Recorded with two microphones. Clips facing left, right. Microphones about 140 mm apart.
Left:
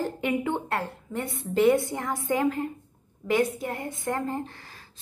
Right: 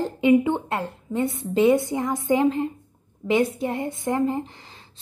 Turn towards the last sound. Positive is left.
turn(degrees=-20)  # may be behind; listen again after turning